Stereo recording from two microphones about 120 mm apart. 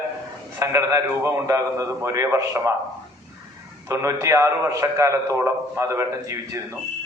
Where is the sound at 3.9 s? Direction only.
25° right (ahead or behind).